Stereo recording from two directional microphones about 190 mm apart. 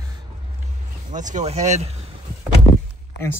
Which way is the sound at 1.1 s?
40° right (ahead or behind).